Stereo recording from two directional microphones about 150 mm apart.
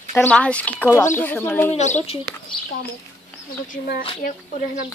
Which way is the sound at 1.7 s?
50° left (ahead or behind).